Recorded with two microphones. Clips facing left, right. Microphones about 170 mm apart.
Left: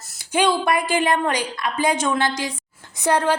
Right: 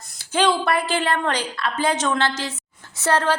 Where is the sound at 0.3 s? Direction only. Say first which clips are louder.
Left 1 dB; 15° left (ahead or behind).